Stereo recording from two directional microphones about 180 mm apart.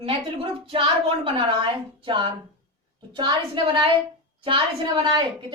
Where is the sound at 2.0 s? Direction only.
25° right (ahead or behind).